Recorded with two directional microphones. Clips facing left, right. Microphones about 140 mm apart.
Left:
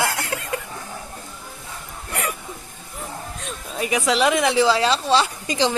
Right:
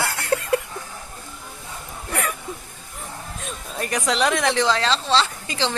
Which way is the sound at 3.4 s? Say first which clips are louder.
Left 2 dB; centre (ahead or behind).